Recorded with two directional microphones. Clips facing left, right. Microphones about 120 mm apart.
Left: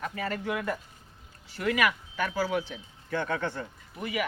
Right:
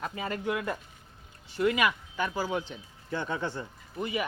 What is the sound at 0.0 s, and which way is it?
Speech, 20° right (ahead or behind).